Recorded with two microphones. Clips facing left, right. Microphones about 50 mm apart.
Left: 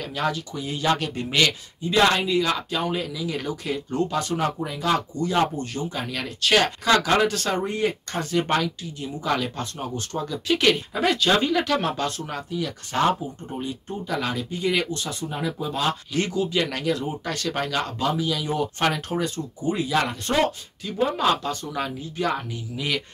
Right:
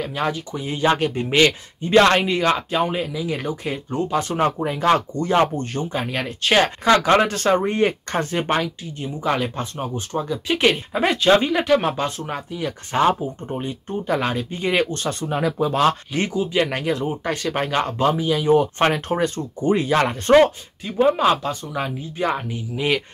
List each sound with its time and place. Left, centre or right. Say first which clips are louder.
0.0 s speech: right 2 dB; right
1.8 s speech: right 5 dB; right
2.7 s speech: right 4 dB; right
4.3 s speech: right 5 dB; right
16.1 s speech: right 2 dB; right
17.6 s speech: right 6 dB; right